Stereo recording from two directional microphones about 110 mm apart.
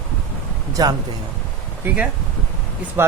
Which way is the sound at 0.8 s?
35° right (ahead or behind).